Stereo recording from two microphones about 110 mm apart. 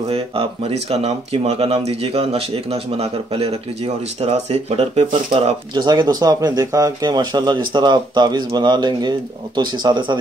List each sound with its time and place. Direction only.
0.1 s speech: 60° right (ahead or behind)
5.8 s speech: 40° right (ahead or behind)